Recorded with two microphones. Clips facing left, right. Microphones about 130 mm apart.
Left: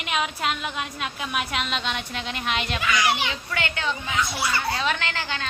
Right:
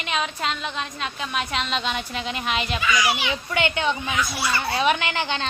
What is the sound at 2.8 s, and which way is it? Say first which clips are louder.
Speech: right 2 dB; 60° left (ahead or behind).